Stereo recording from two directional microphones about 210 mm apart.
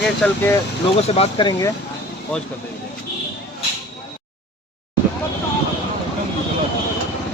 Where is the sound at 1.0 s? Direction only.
25° left (ahead or behind).